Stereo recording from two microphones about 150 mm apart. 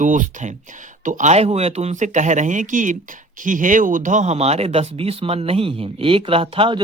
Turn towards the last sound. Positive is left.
turn(degrees=-35)  # may be behind; listen again after turning